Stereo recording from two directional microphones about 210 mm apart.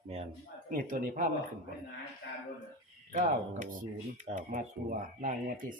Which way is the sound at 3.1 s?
40° right (ahead or behind).